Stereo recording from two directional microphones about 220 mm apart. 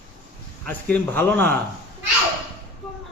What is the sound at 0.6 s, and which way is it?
Speech, 10° left (ahead or behind).